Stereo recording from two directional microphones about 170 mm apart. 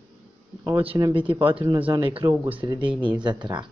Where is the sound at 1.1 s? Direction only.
30° right (ahead or behind).